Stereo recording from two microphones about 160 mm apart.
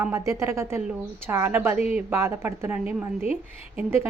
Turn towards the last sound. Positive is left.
turn(degrees=-15)  # may be behind; listen again after turning